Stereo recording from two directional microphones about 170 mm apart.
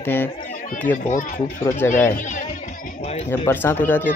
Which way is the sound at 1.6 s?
15° left (ahead or behind).